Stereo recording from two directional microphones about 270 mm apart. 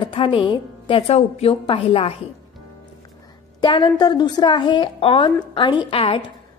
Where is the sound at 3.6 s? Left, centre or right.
Centre.